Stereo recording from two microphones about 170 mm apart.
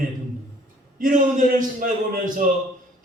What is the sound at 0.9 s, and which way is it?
A man's voice, 55° right (ahead or behind).